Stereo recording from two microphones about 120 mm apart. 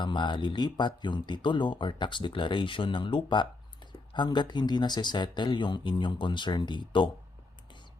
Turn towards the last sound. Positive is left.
turn(degrees=40)  # may be behind; listen again after turning